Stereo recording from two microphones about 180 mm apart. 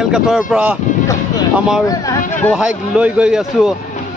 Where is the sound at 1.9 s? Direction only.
20° left (ahead or behind).